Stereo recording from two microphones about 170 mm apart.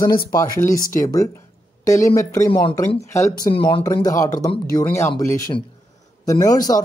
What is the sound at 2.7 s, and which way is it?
Speech, 15° left (ahead or behind).